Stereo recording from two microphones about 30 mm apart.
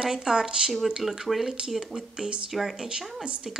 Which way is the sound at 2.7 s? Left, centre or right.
Right.